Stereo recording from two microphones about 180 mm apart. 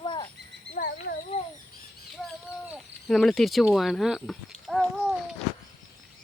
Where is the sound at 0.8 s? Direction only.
50° left (ahead or behind).